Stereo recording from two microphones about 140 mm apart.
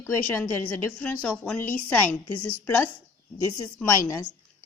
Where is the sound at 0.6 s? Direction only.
10° left (ahead or behind).